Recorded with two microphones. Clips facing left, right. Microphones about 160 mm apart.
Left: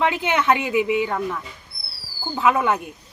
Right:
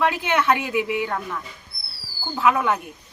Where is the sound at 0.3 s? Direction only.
10° left (ahead or behind).